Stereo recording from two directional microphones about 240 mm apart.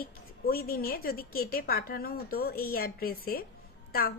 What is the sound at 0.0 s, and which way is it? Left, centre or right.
A woman's voice, left.